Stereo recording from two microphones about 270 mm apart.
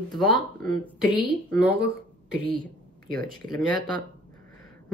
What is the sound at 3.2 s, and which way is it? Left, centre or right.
Speech, right.